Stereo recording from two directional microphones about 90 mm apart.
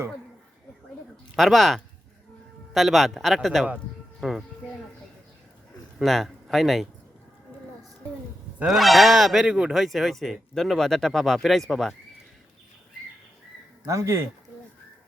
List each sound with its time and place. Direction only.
1.4 s speech: centre (ahead or behind)
6.0 s speech: centre (ahead or behind)
8.6 s speech: centre (ahead or behind)
13.8 s speech: 35° right (ahead or behind)